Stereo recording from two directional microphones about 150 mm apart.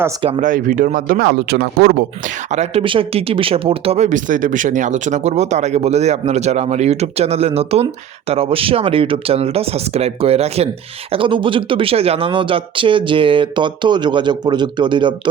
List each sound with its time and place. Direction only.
0.2 s speech: 40° right (ahead or behind)
0.4 s speech: 65° right (ahead or behind); by 2.0 s 90° right
2.5 s speech: 45° right (ahead or behind)